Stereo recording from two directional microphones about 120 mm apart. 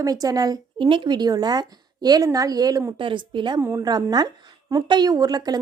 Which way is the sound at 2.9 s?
45° right (ahead or behind).